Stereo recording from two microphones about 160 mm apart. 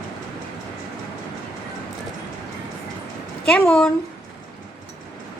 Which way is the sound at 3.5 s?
5° left (ahead or behind).